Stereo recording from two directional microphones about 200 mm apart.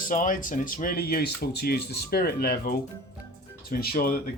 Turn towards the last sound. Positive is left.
turn(degrees=45)  # may be behind; listen again after turning